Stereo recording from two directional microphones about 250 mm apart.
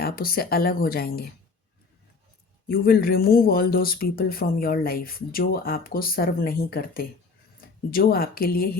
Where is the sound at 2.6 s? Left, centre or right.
Left.